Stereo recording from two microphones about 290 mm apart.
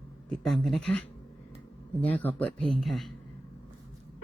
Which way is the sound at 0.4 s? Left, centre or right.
Centre.